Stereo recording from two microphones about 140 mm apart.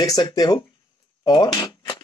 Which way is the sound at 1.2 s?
30° left (ahead or behind).